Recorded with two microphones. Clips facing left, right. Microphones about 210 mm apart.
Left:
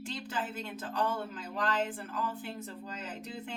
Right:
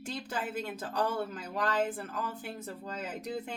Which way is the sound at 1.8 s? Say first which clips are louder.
Right 1 dB; 40° right (ahead or behind).